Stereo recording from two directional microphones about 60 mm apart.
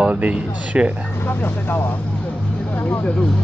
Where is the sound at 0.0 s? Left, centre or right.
Centre.